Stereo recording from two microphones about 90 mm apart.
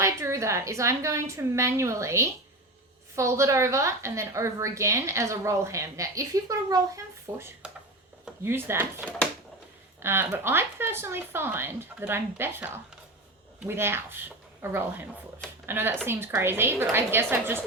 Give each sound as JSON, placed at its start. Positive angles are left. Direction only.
{"t": 0.0, "sound": "a woman's voice", "side_deg": -35}
{"t": 10.0, "sound": "speech", "side_deg": -25}